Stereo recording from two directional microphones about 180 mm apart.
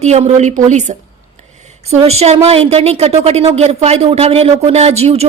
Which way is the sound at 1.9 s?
35° right (ahead or behind).